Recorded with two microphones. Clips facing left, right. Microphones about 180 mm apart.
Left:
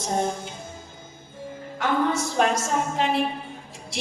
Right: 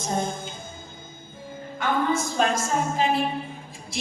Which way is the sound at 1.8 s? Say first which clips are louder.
Left 1 dB; 75° left (ahead or behind).